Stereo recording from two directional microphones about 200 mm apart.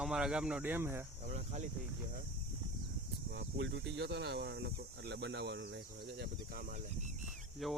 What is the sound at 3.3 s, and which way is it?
Speech, 60° right (ahead or behind).